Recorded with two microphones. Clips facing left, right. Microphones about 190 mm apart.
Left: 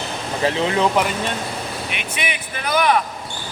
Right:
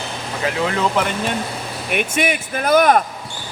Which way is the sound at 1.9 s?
45° right (ahead or behind).